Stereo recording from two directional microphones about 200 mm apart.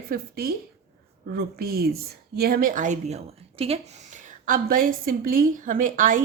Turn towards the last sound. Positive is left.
turn(degrees=-40)  # may be behind; listen again after turning